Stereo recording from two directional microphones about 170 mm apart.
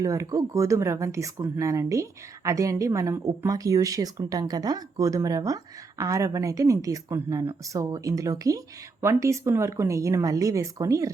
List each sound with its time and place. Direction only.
0.0 s speech: 20° right (ahead or behind)